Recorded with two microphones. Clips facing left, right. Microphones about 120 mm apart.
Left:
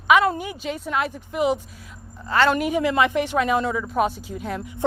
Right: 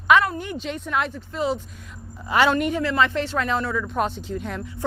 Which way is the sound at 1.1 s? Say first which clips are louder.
Left 3 dB; 15° left (ahead or behind).